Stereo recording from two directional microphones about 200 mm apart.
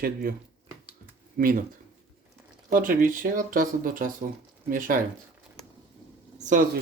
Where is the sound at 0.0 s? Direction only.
50° right (ahead or behind).